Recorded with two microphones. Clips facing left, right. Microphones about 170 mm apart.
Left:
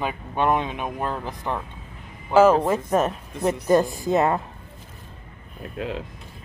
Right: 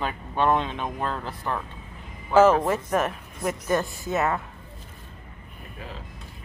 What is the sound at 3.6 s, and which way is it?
Speech, 35° left (ahead or behind).